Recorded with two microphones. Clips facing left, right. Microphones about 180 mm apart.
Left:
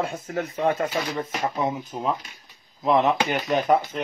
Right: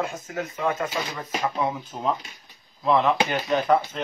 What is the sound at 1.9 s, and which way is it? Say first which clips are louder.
Speech: left 1 dB; 10° left (ahead or behind).